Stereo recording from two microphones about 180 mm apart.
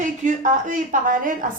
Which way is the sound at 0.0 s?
45° right (ahead or behind).